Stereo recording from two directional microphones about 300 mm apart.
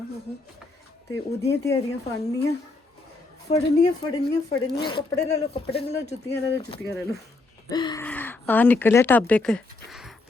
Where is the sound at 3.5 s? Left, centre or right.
Centre.